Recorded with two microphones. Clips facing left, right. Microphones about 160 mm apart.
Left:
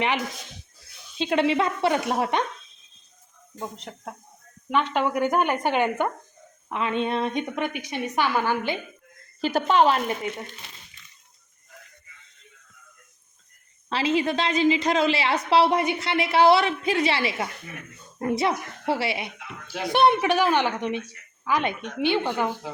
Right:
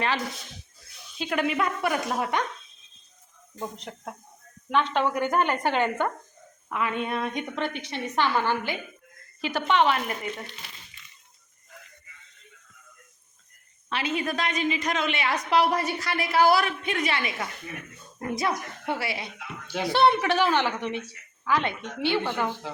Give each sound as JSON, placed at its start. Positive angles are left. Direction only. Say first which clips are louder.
{"t": 1.2, "sound": "a woman's voice", "louder": "left 4 dB", "side_deg": 25}
{"t": 3.6, "sound": "a woman's voice", "louder": "even", "side_deg": 0}
{"t": 9.4, "sound": "a woman's voice", "louder": "left 3 dB", "side_deg": 40}
{"t": 13.9, "sound": "a woman's voice", "louder": "left 5 dB", "side_deg": 30}
{"t": 19.6, "sound": "speech", "louder": "right 1 dB", "side_deg": 0}
{"t": 19.9, "sound": "a woman's voice", "louder": "left 2 dB", "side_deg": 20}